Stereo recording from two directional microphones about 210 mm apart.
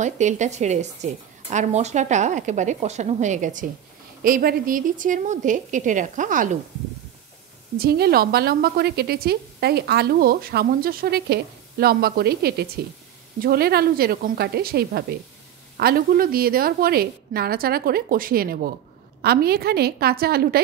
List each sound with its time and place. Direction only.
0.0 s speech: 35° right (ahead or behind)
7.7 s a woman's voice: 45° right (ahead or behind)